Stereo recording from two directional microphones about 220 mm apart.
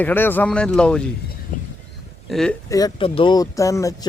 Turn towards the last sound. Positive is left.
turn(degrees=15)  # may be behind; listen again after turning